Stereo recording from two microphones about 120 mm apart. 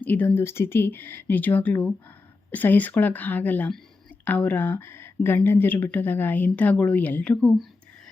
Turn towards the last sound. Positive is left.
turn(degrees=10)  # may be behind; listen again after turning